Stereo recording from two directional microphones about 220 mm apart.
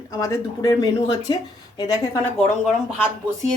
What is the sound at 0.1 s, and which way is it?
A woman's voice, 15° left (ahead or behind).